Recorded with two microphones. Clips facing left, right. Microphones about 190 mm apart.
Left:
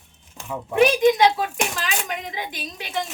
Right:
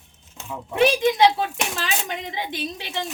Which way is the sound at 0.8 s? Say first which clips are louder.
Left 1 dB; 25° right (ahead or behind).